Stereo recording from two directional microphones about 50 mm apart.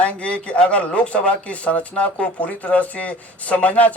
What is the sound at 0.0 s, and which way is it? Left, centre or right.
Speech, left.